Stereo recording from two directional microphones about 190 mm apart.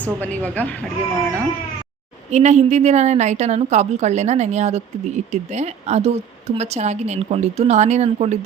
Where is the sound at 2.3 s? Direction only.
35° right (ahead or behind).